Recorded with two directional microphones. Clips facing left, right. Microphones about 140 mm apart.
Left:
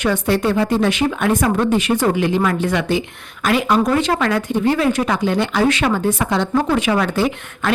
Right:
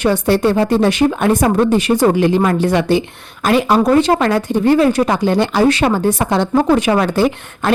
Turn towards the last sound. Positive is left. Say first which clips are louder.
# right 4 dB
turn(degrees=-35)  # may be behind; listen again after turning